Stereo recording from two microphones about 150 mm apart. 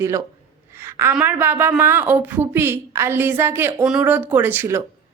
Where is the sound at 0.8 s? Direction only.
15° right (ahead or behind).